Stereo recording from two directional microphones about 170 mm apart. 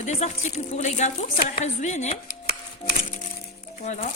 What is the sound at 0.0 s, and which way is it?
A woman's voice, 45° left (ahead or behind).